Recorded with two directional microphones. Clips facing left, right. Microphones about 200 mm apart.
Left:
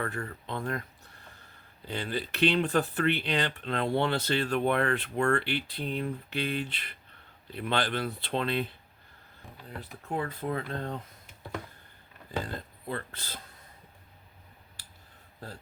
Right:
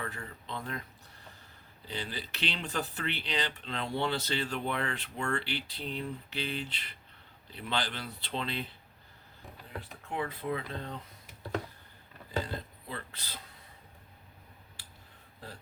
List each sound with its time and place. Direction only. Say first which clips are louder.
0.0 s speech: left 6 dB; 55° left (ahead or behind)
1.9 s speech: left 6 dB; 55° left (ahead or behind)
10.1 s speech: left 2 dB; 45° left (ahead or behind)
12.9 s speech: left 6 dB; 50° left (ahead or behind)